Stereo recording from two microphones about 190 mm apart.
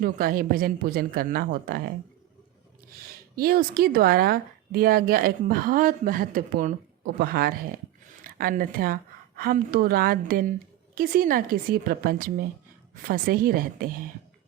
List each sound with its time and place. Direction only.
0.0 s speech: 50° right (ahead or behind)
3.3 s a woman's voice: 50° right (ahead or behind)